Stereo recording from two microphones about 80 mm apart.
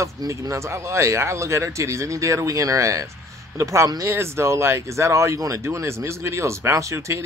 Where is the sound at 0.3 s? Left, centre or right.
Right.